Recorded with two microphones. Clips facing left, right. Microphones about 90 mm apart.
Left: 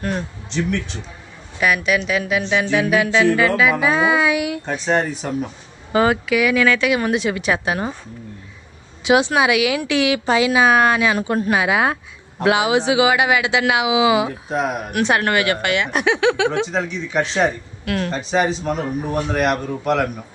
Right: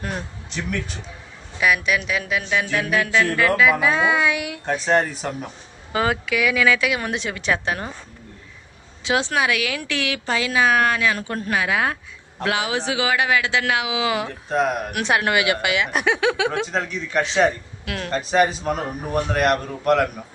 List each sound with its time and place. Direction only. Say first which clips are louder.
0.0 s speech: left 5 dB; 5° right (ahead or behind)
9.0 s a man's voice: left 5 dB; 15° left (ahead or behind)